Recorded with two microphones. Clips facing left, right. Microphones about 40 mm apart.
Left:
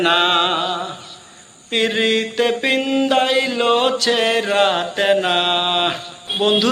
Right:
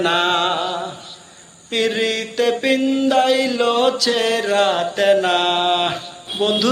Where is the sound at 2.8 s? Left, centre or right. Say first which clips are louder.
Even; left.